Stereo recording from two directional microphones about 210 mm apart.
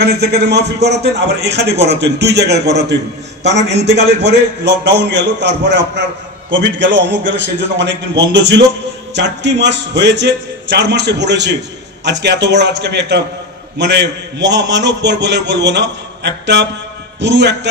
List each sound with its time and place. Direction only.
0.0 s a man's voice: 50° right (ahead or behind)